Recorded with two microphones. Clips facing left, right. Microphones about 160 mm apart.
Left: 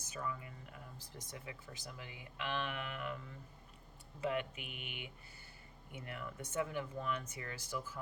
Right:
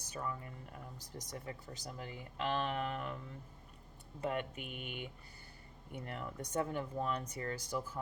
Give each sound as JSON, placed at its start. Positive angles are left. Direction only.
{"t": 0.2, "sound": "speech", "side_deg": -40}
{"t": 4.2, "sound": "speech", "side_deg": -45}